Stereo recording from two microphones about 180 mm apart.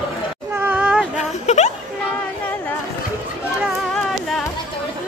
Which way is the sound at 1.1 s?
40° left (ahead or behind).